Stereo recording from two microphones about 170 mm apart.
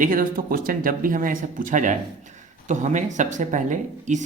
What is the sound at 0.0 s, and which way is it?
Speech, 55° right (ahead or behind).